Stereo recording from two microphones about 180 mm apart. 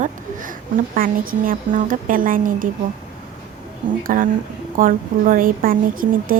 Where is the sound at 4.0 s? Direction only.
50° right (ahead or behind).